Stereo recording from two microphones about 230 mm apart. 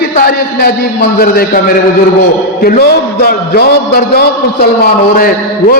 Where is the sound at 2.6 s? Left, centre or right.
Left.